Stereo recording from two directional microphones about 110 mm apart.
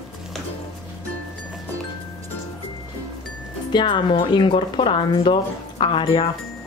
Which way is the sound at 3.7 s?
45° left (ahead or behind).